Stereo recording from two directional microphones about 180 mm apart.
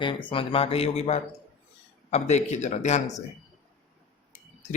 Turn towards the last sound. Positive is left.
turn(degrees=40)  # may be behind; listen again after turning